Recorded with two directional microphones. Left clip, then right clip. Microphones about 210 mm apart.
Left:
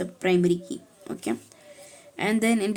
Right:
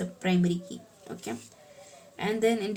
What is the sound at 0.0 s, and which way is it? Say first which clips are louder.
Speech: left 7 dB; 40° left (ahead or behind).